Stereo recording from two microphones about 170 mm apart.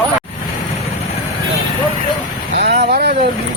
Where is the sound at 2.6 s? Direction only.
80° right.